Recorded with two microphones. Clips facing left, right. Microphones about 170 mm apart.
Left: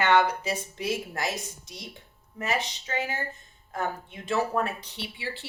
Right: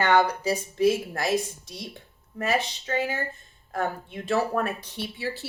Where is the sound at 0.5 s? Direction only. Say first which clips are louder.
Right 8 dB; 55° right (ahead or behind).